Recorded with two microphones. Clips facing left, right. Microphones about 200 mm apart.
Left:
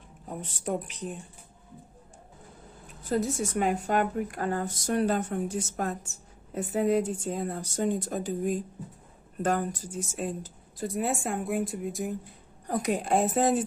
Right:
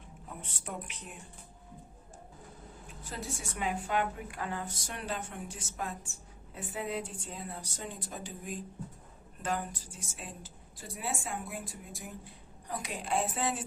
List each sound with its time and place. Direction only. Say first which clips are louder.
0.3 s speech: left 11 dB; 35° left (ahead or behind)
3.0 s a woman's voice: left 14 dB; 40° left (ahead or behind)
12.6 s a woman's voice: left 10 dB; 45° left (ahead or behind)